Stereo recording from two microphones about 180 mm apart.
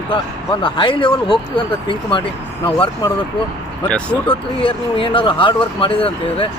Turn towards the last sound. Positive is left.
turn(degrees=30)  # may be behind; listen again after turning